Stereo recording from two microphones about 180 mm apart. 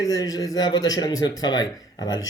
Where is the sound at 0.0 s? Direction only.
20° left (ahead or behind).